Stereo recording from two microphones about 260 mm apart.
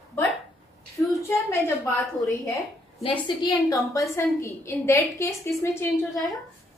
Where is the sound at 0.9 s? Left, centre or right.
Centre.